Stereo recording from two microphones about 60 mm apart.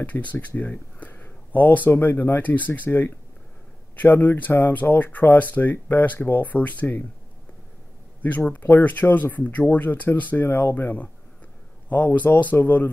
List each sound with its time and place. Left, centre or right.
0.0 s speech: left
8.5 s speech: left